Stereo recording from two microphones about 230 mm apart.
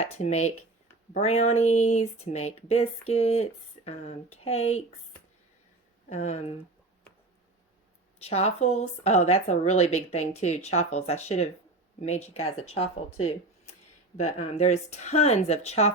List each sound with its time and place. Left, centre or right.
0.0 s speech: left
4.4 s speech: left
6.1 s speech: left
8.2 s speech: left
14.2 s speech: left